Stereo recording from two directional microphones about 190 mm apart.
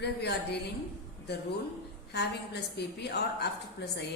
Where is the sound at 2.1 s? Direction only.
60° left (ahead or behind).